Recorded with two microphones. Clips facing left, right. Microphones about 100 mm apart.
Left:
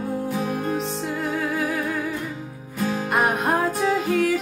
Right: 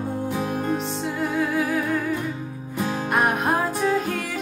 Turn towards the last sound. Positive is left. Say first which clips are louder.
# left 4 dB
turn(degrees=0)  # may be behind; listen again after turning